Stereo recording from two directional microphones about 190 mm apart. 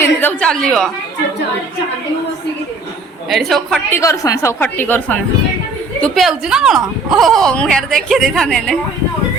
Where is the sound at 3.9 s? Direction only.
15° left (ahead or behind).